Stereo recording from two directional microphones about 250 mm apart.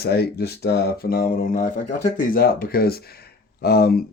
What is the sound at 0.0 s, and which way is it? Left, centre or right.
Speech, left.